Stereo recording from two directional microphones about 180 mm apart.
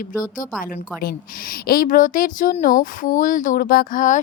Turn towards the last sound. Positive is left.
turn(degrees=45)  # may be behind; listen again after turning